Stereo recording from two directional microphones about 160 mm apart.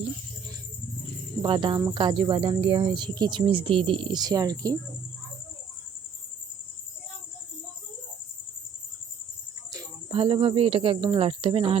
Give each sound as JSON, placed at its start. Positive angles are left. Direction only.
{"t": 1.4, "sound": "speech", "side_deg": -30}
{"t": 10.1, "sound": "speech", "side_deg": -35}